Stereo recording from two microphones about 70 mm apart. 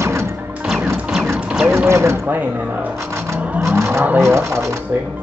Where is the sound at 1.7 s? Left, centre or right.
Right.